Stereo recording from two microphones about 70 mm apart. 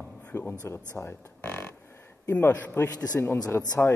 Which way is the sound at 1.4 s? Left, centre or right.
Left.